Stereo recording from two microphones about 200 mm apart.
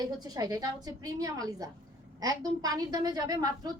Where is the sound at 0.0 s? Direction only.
20° right (ahead or behind).